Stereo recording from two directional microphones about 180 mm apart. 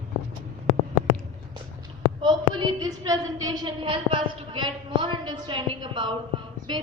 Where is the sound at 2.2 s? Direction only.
25° right (ahead or behind).